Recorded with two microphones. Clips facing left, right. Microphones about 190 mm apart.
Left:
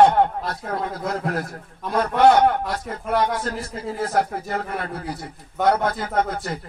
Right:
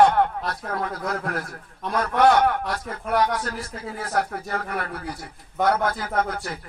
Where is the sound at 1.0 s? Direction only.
25° left (ahead or behind).